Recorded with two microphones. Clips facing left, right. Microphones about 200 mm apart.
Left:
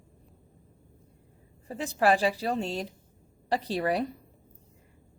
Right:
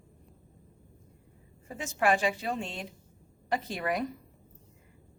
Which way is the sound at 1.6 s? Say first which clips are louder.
Left 3 dB; 35° left (ahead or behind).